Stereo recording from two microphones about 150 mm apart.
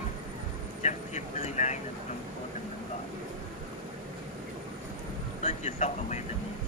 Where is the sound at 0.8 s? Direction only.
50° left (ahead or behind).